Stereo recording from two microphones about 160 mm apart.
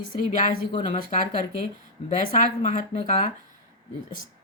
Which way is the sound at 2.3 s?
55° left (ahead or behind).